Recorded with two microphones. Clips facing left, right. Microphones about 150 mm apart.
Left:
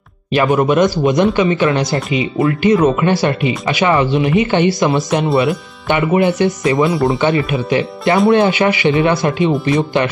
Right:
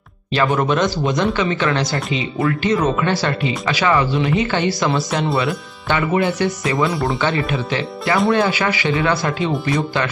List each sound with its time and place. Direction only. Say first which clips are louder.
0.3 s speech: left 4 dB; 15° left (ahead or behind)
6.9 s speech: left 6 dB; centre (ahead or behind)
7.2 s speech: left 5 dB; 20° left (ahead or behind)